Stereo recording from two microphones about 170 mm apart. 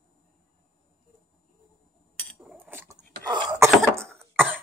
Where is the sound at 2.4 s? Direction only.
10° right (ahead or behind).